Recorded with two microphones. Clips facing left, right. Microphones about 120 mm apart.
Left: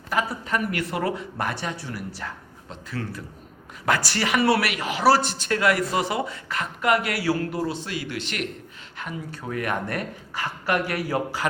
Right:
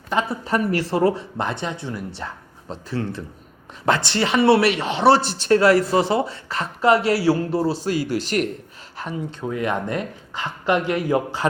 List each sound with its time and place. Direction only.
0.1 s speech: 25° right (ahead or behind)
9.0 s speech: 30° right (ahead or behind)